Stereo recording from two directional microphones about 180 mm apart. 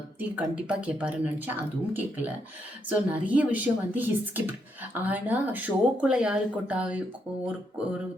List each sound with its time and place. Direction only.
0.2 s speech: 5° right (ahead or behind)